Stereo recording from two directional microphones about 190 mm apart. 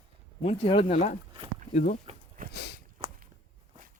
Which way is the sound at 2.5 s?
60° left (ahead or behind).